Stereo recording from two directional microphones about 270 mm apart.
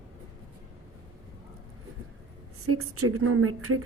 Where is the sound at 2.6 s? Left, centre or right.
Right.